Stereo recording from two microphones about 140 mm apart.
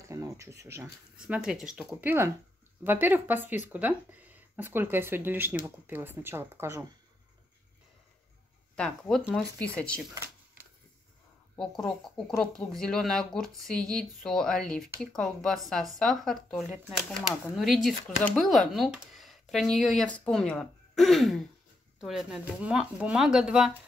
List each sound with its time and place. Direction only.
0.0 s a sound: 20° right (ahead or behind)
1.1 s speech: 5° right (ahead or behind)
2.0 s speech: 15° right (ahead or behind)
8.7 s speech: 5° left (ahead or behind)
10.1 s shuffling cards: 20° right (ahead or behind)
11.5 s speech: 5° left (ahead or behind)